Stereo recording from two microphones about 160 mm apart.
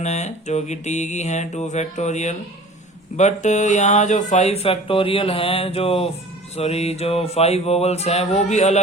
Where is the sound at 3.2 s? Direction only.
45° left (ahead or behind).